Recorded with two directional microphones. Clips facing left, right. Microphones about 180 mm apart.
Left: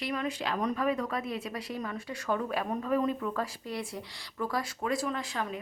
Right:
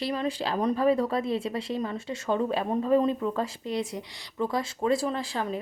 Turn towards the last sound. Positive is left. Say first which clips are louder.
# right 4 dB
turn(degrees=-30)  # may be behind; listen again after turning